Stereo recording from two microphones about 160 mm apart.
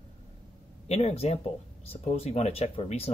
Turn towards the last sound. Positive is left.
turn(degrees=40)  # may be behind; listen again after turning